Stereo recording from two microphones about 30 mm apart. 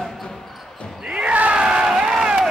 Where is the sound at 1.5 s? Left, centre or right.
Right.